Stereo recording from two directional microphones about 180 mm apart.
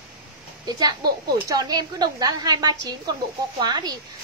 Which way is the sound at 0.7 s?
20° right (ahead or behind).